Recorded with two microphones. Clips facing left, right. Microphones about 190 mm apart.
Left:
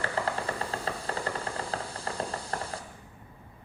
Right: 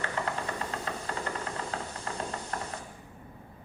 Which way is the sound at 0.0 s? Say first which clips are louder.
Left 2 dB; 30° left (ahead or behind).